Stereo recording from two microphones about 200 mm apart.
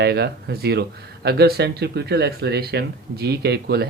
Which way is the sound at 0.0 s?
55° right (ahead or behind).